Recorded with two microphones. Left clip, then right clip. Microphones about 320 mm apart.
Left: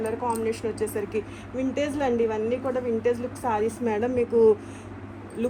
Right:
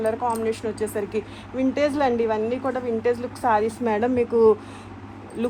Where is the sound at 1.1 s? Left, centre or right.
Centre.